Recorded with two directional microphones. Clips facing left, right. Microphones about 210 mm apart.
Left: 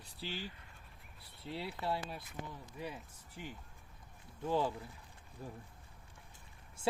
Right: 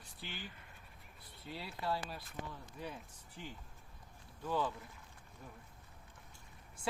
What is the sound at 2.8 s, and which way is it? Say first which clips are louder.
Speech: left 2 dB; 10° left (ahead or behind).